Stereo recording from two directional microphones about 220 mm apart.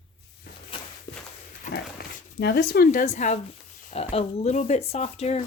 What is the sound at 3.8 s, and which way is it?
Speech, 25° left (ahead or behind).